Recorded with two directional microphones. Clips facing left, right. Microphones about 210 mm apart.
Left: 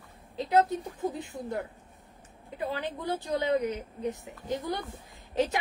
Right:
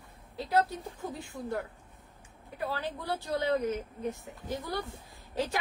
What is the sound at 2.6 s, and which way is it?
A woman's voice, 20° left (ahead or behind).